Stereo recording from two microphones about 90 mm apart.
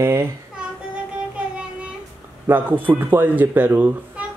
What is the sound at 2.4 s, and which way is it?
Speech, 20° right (ahead or behind).